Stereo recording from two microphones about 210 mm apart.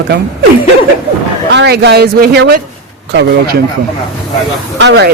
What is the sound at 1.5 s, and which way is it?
Speech, 55° right (ahead or behind).